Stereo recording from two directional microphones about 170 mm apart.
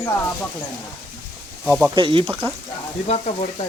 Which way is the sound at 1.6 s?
10° right (ahead or behind).